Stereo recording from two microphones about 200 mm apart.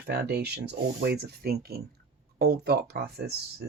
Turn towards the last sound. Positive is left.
turn(degrees=-55)  # may be behind; listen again after turning